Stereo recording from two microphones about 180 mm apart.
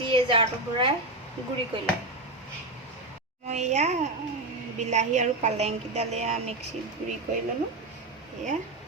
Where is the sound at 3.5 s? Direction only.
40° right (ahead or behind).